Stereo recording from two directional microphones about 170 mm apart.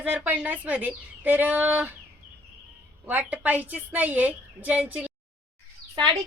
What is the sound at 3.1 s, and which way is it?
A woman's voice, 10° right (ahead or behind).